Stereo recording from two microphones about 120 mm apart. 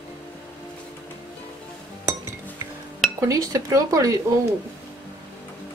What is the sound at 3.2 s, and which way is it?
Speech, 30° right (ahead or behind).